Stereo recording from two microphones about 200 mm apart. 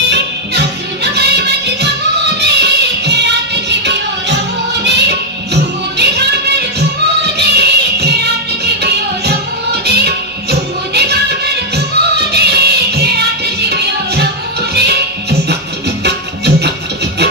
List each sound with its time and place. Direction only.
0.1 s music: 55° right (ahead or behind)
4.8 s music: 60° right (ahead or behind)
7.3 s music: 55° right (ahead or behind)